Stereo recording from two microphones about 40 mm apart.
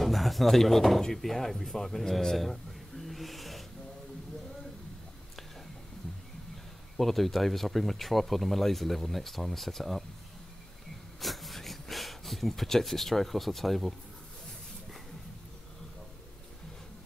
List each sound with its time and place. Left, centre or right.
0.0 s speech: centre
7.0 s speech: centre
11.1 s a sound: centre